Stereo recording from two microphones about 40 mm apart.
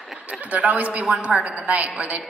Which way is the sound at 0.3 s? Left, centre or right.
Right.